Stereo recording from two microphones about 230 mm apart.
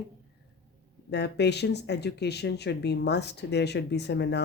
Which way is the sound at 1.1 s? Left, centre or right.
Left.